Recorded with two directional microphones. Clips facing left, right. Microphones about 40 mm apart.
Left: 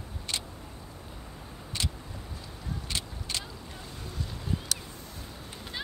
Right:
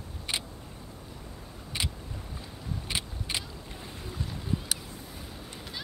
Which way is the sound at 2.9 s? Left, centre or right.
Centre.